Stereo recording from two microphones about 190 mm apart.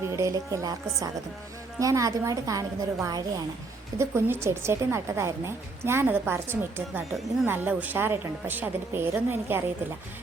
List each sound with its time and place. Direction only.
0.0 s speech: 15° right (ahead or behind)